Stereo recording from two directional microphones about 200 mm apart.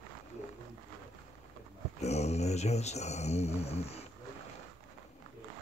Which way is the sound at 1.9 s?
35° left (ahead or behind).